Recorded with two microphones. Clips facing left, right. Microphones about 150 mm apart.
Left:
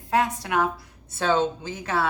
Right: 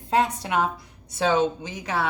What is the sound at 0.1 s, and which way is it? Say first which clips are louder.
A woman's voice: right 1 dB; 20° right (ahead or behind).